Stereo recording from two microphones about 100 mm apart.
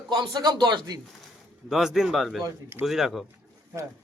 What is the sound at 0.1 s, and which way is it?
Speech, 45° right (ahead or behind).